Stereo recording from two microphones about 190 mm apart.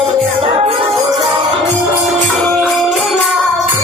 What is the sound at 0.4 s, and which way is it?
Music, 30° right (ahead or behind).